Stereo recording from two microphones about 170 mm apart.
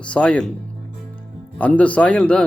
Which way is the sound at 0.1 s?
5° left (ahead or behind).